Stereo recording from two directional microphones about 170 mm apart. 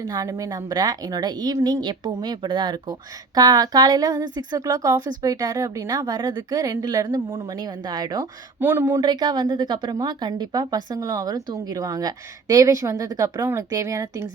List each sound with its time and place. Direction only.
0.0 s a woman's voice: 20° right (ahead or behind)